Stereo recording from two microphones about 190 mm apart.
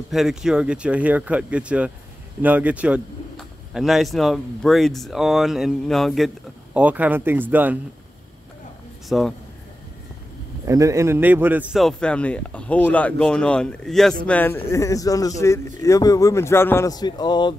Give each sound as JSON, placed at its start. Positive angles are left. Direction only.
{"t": 0.1, "sound": "speech", "side_deg": 0}
{"t": 9.1, "sound": "speech", "side_deg": 0}
{"t": 10.6, "sound": "speech", "side_deg": -15}